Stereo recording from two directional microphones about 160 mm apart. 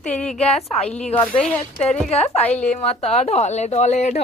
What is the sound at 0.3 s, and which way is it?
Speech, 40° left (ahead or behind).